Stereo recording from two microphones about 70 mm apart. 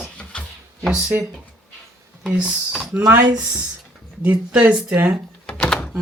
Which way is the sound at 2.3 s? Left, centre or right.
Centre.